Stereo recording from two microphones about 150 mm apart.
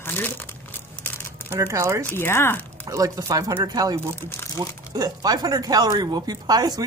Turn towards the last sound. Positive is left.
turn(degrees=-25)  # may be behind; listen again after turning